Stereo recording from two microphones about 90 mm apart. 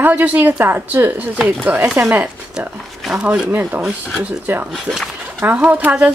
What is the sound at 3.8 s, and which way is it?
Speech, 5° right (ahead or behind).